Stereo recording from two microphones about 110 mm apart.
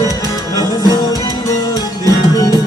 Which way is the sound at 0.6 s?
35° left (ahead or behind).